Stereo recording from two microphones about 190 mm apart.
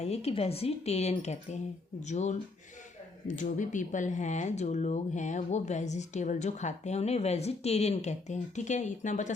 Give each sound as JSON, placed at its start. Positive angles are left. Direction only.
{"t": 0.0, "sound": "speech", "side_deg": 35}